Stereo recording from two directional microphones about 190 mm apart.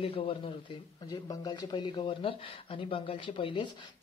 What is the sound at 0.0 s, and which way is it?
Speech, 30° left (ahead or behind).